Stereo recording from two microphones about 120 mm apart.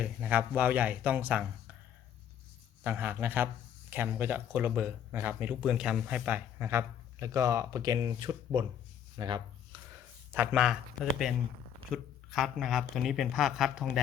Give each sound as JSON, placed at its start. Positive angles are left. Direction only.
{"t": 0.0, "sound": "speech", "side_deg": -10}
{"t": 2.8, "sound": "a man's voice", "side_deg": -15}
{"t": 10.5, "sound": "speech", "side_deg": -5}